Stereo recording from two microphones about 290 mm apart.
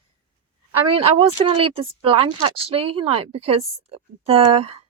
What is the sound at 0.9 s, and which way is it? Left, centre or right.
A woman's voice, centre.